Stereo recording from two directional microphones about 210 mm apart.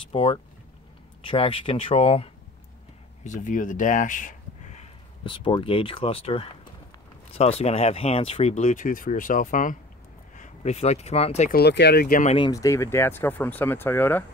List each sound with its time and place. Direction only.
0.1 s speech: 25° left (ahead or behind)
11.5 s speech: 50° left (ahead or behind)
12.4 s speech: 15° left (ahead or behind)